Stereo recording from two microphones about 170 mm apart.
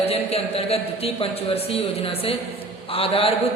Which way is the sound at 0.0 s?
35° left (ahead or behind).